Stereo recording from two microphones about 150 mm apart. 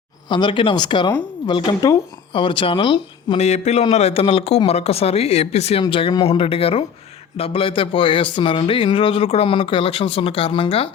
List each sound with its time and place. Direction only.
0.3 s a man's voice: 30° left (ahead or behind)
3.4 s a man's voice: 50° left (ahead or behind)